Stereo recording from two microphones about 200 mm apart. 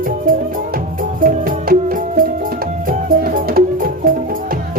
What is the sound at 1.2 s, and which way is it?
Music, 45° right (ahead or behind).